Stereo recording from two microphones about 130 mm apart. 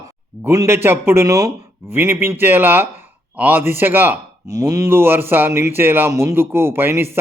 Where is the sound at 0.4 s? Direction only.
20° right (ahead or behind).